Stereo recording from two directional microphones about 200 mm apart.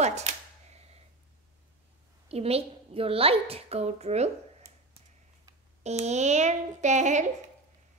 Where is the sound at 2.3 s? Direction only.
30° right (ahead or behind).